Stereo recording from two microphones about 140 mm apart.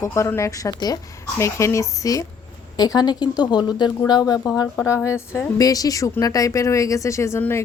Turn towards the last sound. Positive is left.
turn(degrees=15)  # may be behind; listen again after turning